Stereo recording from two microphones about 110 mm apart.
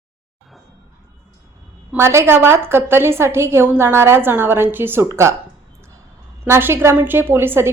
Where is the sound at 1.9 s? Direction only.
25° right (ahead or behind).